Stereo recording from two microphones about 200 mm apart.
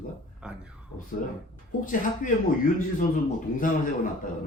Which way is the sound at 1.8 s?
40° left (ahead or behind).